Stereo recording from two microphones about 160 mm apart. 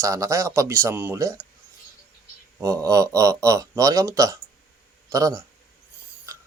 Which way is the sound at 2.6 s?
20° right (ahead or behind).